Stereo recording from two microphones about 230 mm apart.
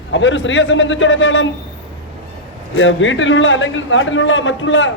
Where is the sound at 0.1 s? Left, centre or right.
Left.